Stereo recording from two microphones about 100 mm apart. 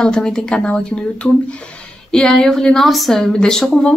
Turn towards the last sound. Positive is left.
turn(degrees=5)  # may be behind; listen again after turning